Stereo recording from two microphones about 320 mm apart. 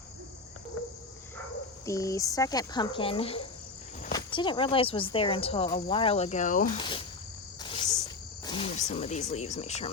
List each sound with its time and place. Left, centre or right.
1.9 s speech: centre
7.6 s cricket: centre
8.4 s speech: centre